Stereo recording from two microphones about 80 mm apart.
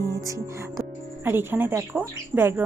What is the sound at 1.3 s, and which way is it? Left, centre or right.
A woman's voice, right.